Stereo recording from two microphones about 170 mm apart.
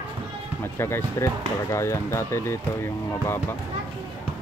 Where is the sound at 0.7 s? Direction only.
15° left (ahead or behind).